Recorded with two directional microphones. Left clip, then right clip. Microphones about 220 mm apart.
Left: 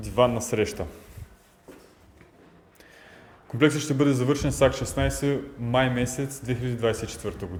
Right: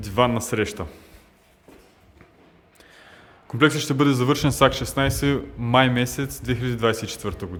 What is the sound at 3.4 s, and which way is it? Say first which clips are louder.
A man's voice: right 3 dB; 25° right (ahead or behind).